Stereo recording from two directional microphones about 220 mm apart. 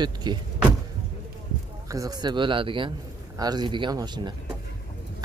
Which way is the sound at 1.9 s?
15° right (ahead or behind).